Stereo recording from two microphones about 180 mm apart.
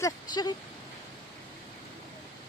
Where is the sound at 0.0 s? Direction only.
25° left (ahead or behind).